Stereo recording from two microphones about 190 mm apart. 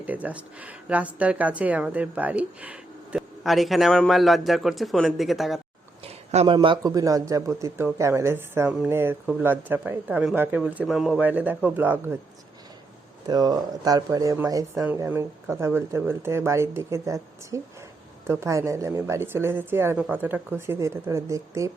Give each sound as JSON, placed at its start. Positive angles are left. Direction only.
{"t": 0.0, "sound": "speech", "side_deg": -10}
{"t": 6.1, "sound": "speech", "side_deg": -30}
{"t": 13.2, "sound": "speech", "side_deg": -20}